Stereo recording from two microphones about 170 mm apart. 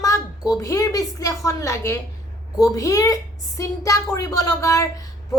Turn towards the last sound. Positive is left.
turn(degrees=20)  # may be behind; listen again after turning